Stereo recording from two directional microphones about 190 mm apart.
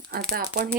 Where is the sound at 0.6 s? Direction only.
45° right (ahead or behind).